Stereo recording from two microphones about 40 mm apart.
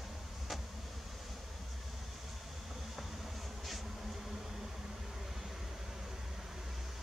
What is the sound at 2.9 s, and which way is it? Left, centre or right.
Vehicle, centre.